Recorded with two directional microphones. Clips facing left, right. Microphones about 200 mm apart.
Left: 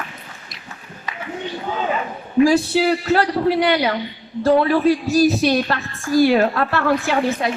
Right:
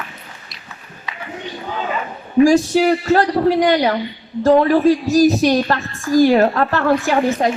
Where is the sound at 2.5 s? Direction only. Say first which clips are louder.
Right 3 dB; 45° right (ahead or behind).